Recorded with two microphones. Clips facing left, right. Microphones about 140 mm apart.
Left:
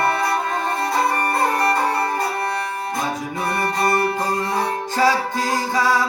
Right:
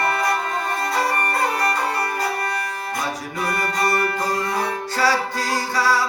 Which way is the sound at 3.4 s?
25° left (ahead or behind).